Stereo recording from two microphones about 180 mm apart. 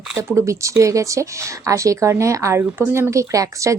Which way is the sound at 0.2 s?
15° right (ahead or behind).